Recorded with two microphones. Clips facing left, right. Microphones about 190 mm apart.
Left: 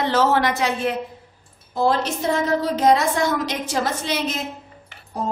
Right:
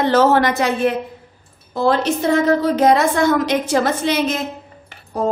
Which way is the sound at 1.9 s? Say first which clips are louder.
Right 5 dB; 60° right (ahead or behind).